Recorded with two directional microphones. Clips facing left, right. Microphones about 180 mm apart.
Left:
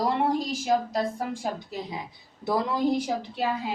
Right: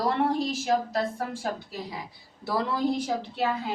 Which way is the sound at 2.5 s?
15° left (ahead or behind).